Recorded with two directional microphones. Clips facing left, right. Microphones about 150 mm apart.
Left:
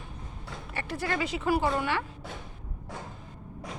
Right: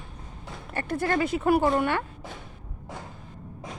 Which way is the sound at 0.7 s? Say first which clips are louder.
Right 6 dB; 50° right (ahead or behind).